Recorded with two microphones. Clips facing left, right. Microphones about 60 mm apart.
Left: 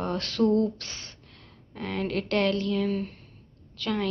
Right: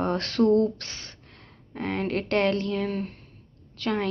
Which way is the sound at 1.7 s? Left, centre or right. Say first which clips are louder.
Right 2 dB; right.